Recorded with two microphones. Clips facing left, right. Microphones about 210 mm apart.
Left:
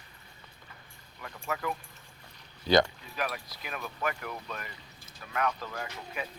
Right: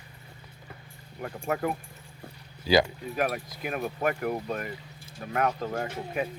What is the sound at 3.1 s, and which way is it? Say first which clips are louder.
Speech: right 6 dB; 50° right (ahead or behind).